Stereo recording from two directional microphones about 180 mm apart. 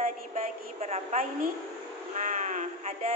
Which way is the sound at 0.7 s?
35° right (ahead or behind).